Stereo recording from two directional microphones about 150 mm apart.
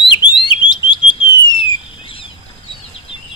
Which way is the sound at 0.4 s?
30° left (ahead or behind).